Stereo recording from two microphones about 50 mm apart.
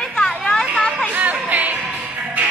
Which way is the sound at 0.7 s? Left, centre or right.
Left.